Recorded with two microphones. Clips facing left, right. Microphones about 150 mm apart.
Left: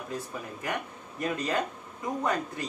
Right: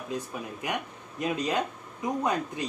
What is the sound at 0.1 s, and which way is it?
Speech, 20° right (ahead or behind).